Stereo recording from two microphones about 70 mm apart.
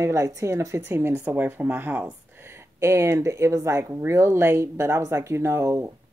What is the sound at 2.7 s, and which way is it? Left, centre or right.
Speech, right.